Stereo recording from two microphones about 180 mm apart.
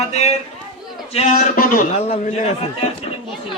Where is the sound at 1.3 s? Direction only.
50° left (ahead or behind); by 3.0 s 35° left (ahead or behind).